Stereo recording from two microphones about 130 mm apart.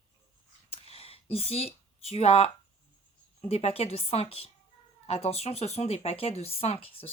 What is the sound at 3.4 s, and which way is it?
Speech, 50° left (ahead or behind).